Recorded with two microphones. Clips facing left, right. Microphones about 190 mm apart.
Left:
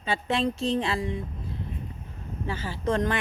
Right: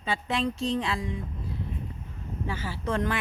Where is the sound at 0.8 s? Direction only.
Centre (ahead or behind).